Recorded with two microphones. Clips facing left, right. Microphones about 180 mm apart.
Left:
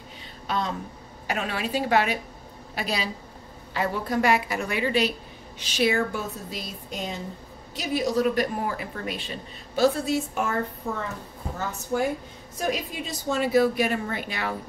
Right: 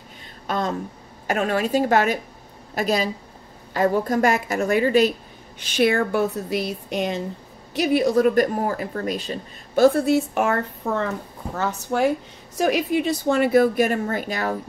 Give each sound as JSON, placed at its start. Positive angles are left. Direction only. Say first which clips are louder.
{"t": 0.5, "sound": "a woman's voice", "louder": "right 4 dB", "side_deg": -45}
{"t": 12.5, "sound": "speech", "louder": "right 8 dB", "side_deg": -70}